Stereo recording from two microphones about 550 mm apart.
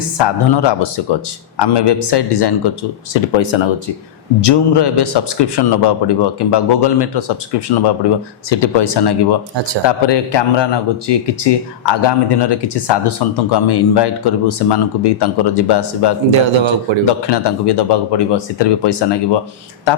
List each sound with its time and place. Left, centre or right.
0.2 s speech: left
16.3 s a man's voice: right
17.1 s speech: left